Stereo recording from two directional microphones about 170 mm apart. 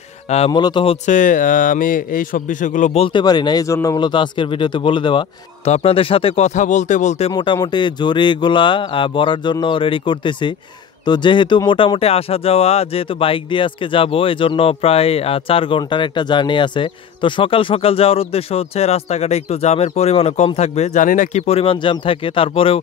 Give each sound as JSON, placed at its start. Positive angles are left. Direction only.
{"t": 0.5, "sound": "speech", "side_deg": 25}
{"t": 1.0, "sound": "speech", "side_deg": 50}